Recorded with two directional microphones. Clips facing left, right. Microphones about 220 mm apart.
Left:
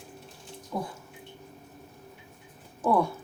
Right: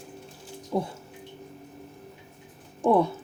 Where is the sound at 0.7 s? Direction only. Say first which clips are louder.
Right 6 dB; 20° right (ahead or behind).